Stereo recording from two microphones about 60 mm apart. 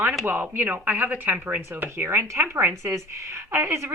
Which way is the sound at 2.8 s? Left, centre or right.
Right.